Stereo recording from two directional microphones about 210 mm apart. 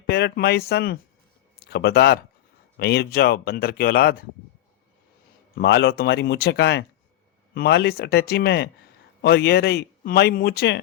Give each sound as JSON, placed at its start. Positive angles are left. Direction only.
{"t": 0.1, "sound": "speech", "side_deg": 50}
{"t": 5.5, "sound": "speech", "side_deg": 55}